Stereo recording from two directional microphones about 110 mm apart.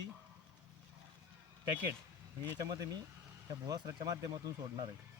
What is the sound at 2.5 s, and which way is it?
Speech, 35° right (ahead or behind).